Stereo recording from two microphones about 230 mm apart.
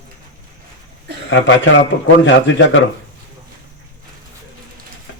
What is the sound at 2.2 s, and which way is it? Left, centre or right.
Speech, left.